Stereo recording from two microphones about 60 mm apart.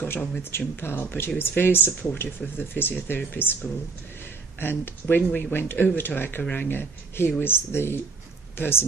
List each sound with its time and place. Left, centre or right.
0.4 s speech: left